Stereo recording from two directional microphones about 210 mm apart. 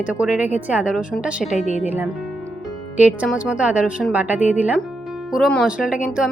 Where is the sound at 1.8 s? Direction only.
10° right (ahead or behind).